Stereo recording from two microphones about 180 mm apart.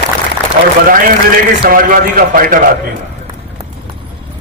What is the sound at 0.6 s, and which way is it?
A man's voice, 60° right (ahead or behind).